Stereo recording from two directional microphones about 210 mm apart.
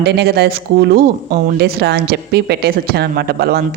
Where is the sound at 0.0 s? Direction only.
50° right (ahead or behind).